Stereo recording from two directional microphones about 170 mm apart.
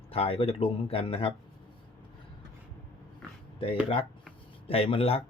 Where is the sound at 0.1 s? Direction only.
35° left (ahead or behind).